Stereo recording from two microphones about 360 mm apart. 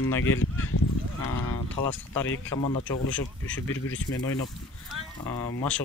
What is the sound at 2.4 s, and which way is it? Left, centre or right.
Speech, centre.